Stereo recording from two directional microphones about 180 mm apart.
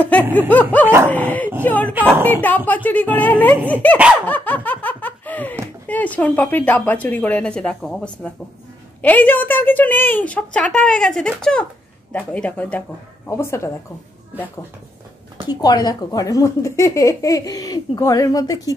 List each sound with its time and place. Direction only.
0.0 s a woman's voice: 10° left (ahead or behind)
0.8 s dog: 15° right (ahead or behind)
1.1 s a woman's voice: 10° left (ahead or behind)
2.0 s dog: 10° right (ahead or behind)
2.2 s a woman's voice: 10° left (ahead or behind)
4.3 s laughter: 10° left (ahead or behind)
5.9 s a woman's voice: 10° left (ahead or behind)
15.4 s speech: 20° left (ahead or behind)